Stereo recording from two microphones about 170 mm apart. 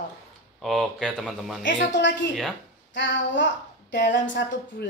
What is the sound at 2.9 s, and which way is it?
A woman's voice, 90° left.